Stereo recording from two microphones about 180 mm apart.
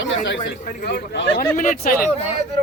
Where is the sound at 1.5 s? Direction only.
50° left (ahead or behind).